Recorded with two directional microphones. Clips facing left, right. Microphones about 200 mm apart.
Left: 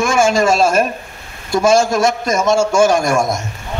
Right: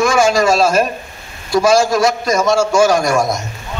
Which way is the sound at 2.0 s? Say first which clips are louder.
Right 1 dB; 25° left (ahead or behind).